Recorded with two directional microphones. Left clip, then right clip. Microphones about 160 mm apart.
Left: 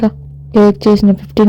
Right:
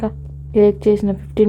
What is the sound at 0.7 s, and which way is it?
Speech, 45° left (ahead or behind).